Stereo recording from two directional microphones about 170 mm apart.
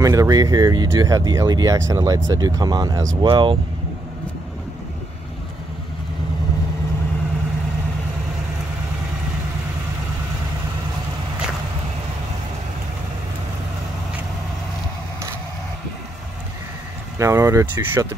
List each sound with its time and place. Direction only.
0.0 s speech: 20° right (ahead or behind)
17.2 s speech: 15° right (ahead or behind)